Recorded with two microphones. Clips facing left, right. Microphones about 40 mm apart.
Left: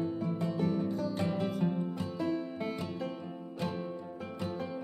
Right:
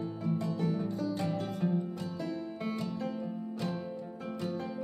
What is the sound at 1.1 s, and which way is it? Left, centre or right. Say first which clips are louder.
Music: left 1 dB; left.